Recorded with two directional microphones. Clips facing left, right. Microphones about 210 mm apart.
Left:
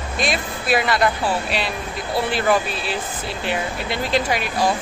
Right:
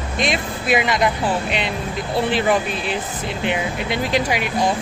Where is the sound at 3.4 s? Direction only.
15° right (ahead or behind).